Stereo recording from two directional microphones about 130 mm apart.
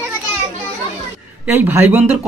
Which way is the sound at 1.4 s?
15° right (ahead or behind).